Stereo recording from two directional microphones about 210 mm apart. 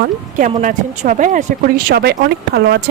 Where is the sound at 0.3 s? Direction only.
35° right (ahead or behind).